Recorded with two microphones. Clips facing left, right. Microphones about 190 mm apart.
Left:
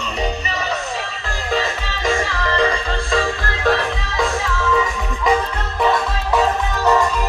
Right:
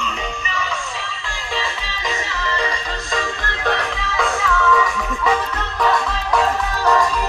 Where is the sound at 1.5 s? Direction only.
45° left (ahead or behind).